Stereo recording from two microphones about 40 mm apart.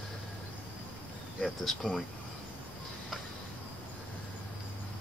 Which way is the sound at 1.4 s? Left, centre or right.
Centre.